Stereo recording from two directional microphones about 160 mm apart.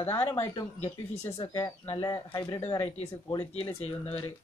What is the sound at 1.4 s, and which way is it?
Speech, 25° left (ahead or behind).